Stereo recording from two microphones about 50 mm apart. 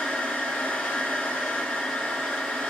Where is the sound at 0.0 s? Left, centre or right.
Centre.